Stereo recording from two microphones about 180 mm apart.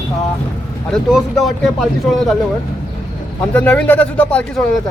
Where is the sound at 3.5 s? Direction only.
10° left (ahead or behind).